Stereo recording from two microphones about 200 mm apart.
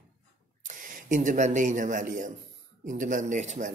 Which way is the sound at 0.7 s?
40° right (ahead or behind).